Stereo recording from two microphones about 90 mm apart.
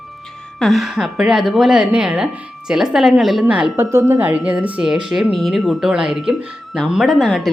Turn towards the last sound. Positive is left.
turn(degrees=0)  # may be behind; listen again after turning